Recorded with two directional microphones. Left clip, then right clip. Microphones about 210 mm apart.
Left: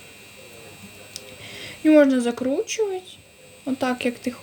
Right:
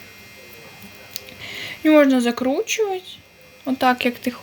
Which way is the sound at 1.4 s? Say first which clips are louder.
Right 1 dB; 10° left (ahead or behind).